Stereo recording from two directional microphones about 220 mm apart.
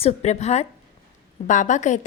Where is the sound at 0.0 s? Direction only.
30° left (ahead or behind).